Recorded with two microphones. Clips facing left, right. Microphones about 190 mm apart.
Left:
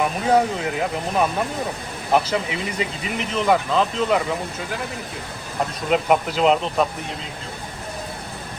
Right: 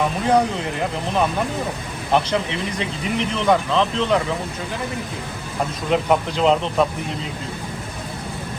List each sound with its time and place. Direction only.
0.3 s speech: 5° left (ahead or behind)
5.9 s speech: 5° left (ahead or behind)